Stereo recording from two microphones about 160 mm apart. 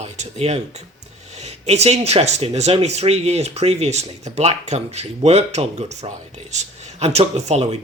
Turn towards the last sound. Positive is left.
turn(degrees=-40)  # may be behind; listen again after turning